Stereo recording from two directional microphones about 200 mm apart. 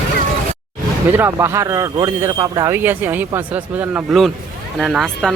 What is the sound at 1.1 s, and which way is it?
A man's voice, 10° right (ahead or behind).